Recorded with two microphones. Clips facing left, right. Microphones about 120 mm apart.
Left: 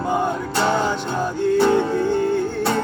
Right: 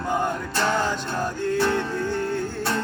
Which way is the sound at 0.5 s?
15° left (ahead or behind).